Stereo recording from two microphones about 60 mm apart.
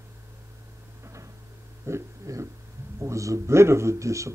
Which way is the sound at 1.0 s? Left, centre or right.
Right.